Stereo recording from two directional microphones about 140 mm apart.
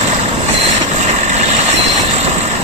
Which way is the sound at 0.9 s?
55° right (ahead or behind).